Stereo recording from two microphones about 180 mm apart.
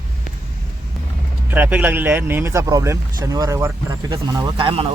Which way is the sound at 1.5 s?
10° right (ahead or behind).